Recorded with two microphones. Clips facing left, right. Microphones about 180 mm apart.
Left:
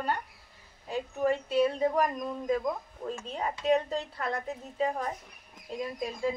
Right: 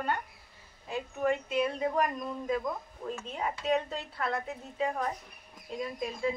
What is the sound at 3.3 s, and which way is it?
Speech, 35° left (ahead or behind).